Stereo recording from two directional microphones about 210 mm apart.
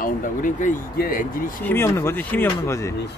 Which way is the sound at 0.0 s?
40° left (ahead or behind).